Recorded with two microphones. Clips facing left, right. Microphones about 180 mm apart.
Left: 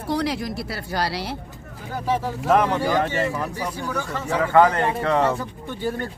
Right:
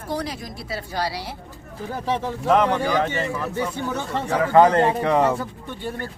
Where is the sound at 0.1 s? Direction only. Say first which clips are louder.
Left 4 dB; 75° left (ahead or behind).